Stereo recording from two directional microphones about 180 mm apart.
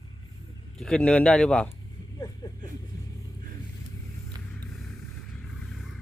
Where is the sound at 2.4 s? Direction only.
20° left (ahead or behind).